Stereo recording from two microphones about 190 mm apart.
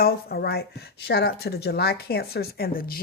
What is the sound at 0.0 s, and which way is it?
Speech, 55° left (ahead or behind).